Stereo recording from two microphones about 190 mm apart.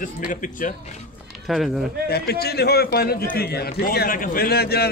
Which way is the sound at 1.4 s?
Centre (ahead or behind).